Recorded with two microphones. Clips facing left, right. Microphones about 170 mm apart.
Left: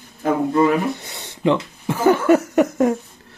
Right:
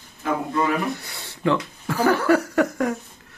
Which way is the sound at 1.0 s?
20° left (ahead or behind).